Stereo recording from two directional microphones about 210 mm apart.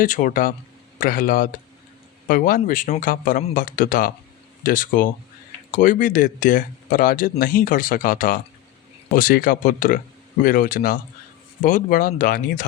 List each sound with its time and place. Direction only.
0.0 s speech: 40° left (ahead or behind)